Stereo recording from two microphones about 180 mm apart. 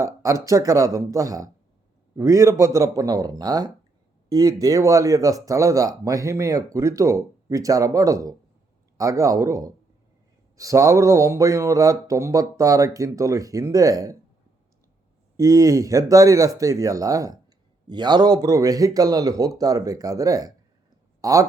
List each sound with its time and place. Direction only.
0.0 s speech: 15° right (ahead or behind)
15.4 s speech: 20° right (ahead or behind)